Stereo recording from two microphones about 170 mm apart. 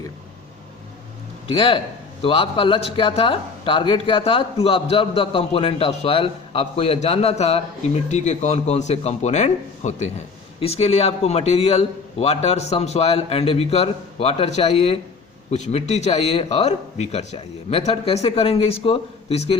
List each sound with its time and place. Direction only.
1.5 s a man's voice: 30° left (ahead or behind)